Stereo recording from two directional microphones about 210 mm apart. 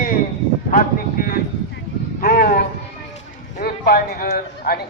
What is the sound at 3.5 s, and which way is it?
Speech, 45° left (ahead or behind).